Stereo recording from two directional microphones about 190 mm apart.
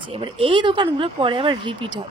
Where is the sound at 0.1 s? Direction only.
30° right (ahead or behind).